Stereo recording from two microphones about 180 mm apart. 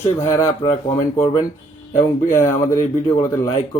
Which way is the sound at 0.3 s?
15° left (ahead or behind).